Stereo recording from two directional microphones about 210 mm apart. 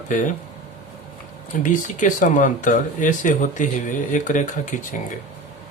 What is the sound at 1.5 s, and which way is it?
Speech, 40° left (ahead or behind).